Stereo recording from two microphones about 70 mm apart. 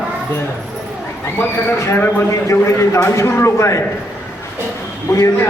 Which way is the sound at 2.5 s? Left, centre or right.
Left.